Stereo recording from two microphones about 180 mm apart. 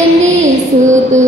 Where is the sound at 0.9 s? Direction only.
40° right (ahead or behind).